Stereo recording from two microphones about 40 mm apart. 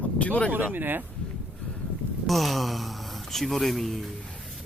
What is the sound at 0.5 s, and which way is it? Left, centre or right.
Speech, right.